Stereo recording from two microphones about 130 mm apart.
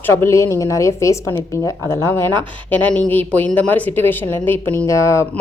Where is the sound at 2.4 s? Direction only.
10° left (ahead or behind).